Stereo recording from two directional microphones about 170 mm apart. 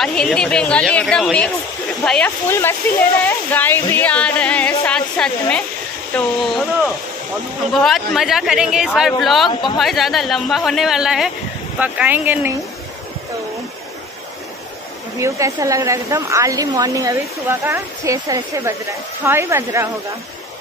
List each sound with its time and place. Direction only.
0.0 s speech: 5° left (ahead or behind)
7.7 s speech: centre (ahead or behind)
9.5 s speech: 30° left (ahead or behind)
9.8 s speech: centre (ahead or behind)
15.1 s a woman's voice: 20° right (ahead or behind)